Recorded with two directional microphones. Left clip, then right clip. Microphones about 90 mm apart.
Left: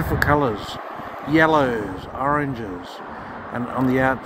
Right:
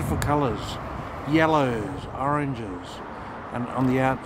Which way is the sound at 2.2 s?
15° right (ahead or behind).